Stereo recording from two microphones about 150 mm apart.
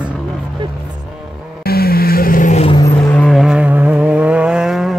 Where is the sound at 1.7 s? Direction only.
90° left; by 2.7 s 55° left (ahead or behind).